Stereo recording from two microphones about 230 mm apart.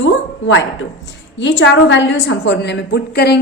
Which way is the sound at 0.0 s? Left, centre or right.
Left.